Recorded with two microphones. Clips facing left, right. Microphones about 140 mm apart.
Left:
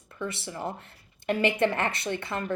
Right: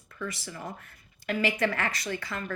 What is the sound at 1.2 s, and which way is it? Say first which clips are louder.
A woman's voice: left 3 dB; 25° left (ahead or behind).